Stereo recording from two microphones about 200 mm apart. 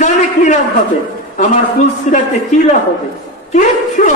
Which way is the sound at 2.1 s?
35° left (ahead or behind).